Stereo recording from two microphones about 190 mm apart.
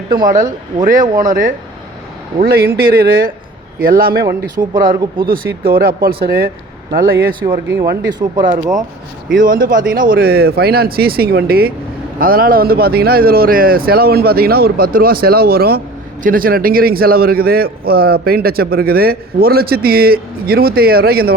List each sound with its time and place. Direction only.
0.1 s a man's voice: 45° right (ahead or behind)
4.6 s speech: 25° right (ahead or behind)
5.2 s a man's voice: 50° right (ahead or behind)
8.4 s speech: 20° right (ahead or behind)
9.4 s a man's voice: 45° right (ahead or behind)